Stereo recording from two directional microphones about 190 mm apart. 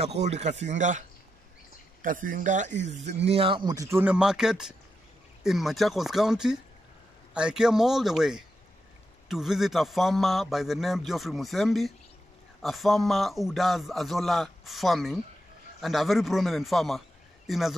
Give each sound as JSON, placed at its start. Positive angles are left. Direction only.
{"t": 0.0, "sound": "a man's voice", "side_deg": -35}